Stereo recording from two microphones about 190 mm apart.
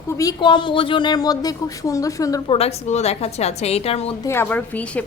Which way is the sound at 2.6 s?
35° left (ahead or behind).